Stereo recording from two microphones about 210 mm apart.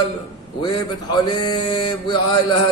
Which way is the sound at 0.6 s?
20° left (ahead or behind).